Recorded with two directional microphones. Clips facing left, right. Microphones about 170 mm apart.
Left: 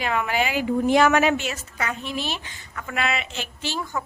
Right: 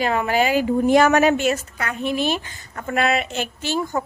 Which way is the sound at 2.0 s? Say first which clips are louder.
Right 8 dB; 55° right (ahead or behind).